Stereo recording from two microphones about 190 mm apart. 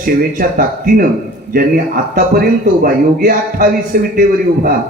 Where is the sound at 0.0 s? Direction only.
50° right (ahead or behind).